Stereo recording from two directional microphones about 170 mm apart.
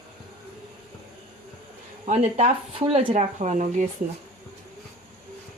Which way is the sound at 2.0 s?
40° right (ahead or behind).